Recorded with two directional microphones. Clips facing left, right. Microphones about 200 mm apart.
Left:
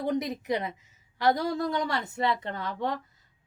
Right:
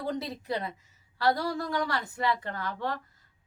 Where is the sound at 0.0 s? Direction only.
20° left (ahead or behind).